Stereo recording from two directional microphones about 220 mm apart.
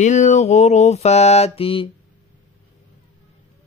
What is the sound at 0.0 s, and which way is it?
Mantra, 35° left (ahead or behind).